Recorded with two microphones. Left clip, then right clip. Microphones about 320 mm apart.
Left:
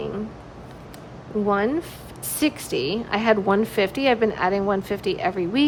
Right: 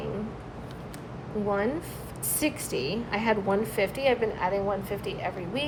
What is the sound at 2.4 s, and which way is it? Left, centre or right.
A woman's voice, left.